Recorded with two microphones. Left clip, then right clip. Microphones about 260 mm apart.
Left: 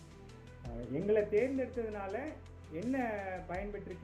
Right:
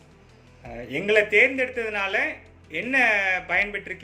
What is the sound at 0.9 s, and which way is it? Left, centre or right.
Speech, centre.